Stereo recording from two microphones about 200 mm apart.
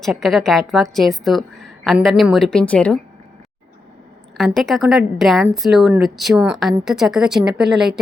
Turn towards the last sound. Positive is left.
turn(degrees=0)  # may be behind; listen again after turning